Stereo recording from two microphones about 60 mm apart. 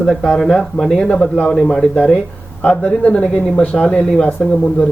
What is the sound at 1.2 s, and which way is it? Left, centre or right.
Speech, left.